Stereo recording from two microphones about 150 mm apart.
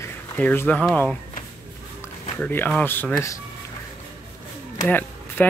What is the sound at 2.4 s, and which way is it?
Speech, 15° left (ahead or behind).